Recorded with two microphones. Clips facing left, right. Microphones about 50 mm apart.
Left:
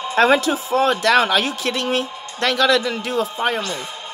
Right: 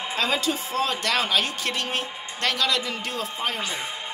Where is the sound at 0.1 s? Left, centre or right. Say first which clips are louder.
Left 10 dB; left.